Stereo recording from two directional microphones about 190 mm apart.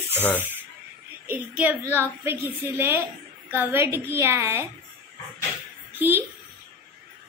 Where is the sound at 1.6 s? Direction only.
10° right (ahead or behind).